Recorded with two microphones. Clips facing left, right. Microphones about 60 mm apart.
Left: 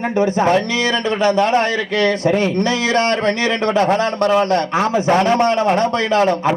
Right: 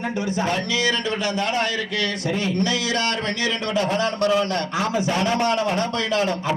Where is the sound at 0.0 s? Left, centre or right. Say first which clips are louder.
Left 8 dB; left.